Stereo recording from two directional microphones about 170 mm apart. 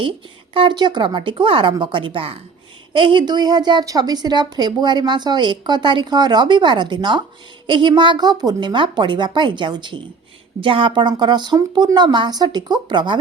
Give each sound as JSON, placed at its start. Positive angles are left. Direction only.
{"t": 0.5, "sound": "a woman's voice", "side_deg": -30}